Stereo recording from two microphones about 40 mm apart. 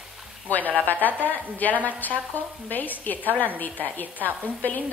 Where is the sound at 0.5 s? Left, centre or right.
Left.